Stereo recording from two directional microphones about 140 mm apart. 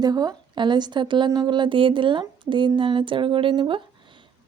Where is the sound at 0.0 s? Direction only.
30° right (ahead or behind).